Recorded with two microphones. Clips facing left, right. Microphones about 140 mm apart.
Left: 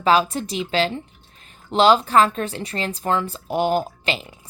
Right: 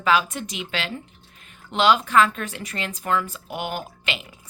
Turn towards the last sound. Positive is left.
turn(degrees=35)  # may be behind; listen again after turning